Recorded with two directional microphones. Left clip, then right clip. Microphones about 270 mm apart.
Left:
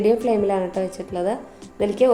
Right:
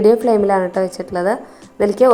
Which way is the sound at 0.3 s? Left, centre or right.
Centre.